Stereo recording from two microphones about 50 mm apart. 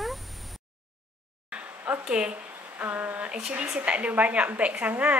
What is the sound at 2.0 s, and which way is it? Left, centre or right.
Speech, centre.